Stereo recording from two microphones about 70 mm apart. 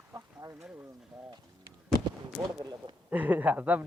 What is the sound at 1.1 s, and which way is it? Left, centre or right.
Pigeon, centre.